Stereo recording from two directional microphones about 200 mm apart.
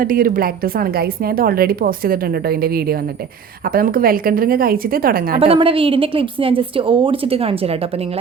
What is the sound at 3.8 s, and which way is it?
A woman's voice, 45° right (ahead or behind).